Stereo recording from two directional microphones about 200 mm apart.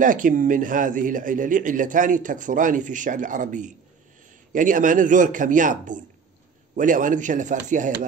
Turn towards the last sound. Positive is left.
turn(degrees=-40)  # may be behind; listen again after turning